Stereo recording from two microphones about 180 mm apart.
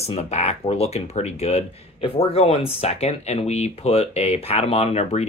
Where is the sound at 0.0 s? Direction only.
35° left (ahead or behind).